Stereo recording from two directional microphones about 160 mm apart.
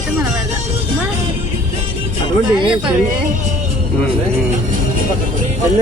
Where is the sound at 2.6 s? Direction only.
30° right (ahead or behind).